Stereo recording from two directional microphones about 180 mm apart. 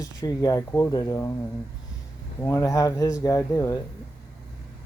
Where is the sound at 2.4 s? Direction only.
15° left (ahead or behind).